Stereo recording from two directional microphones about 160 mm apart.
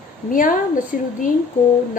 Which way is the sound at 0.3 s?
60° left (ahead or behind).